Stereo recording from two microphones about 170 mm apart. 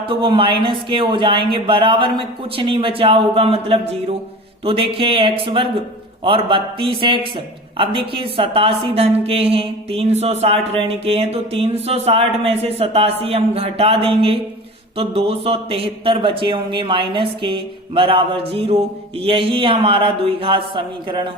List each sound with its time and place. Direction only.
0.0 s a woman's voice: 30° right (ahead or behind)